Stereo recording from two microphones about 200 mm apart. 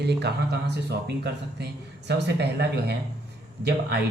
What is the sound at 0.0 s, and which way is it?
Speech, 55° right (ahead or behind).